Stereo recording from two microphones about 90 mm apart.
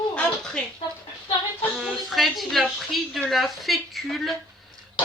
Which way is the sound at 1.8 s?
5° right (ahead or behind).